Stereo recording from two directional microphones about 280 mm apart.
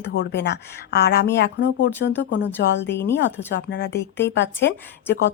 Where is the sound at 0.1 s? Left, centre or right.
Left.